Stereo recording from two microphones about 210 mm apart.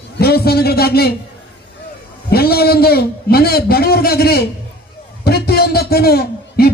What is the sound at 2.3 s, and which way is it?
A man's voice, 45° left (ahead or behind).